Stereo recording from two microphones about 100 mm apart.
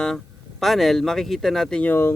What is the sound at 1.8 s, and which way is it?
Speech, 20° left (ahead or behind).